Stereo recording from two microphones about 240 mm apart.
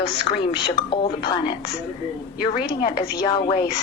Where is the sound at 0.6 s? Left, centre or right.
Centre.